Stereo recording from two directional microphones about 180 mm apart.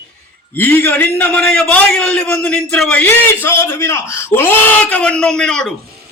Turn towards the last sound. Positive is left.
turn(degrees=5)  # may be behind; listen again after turning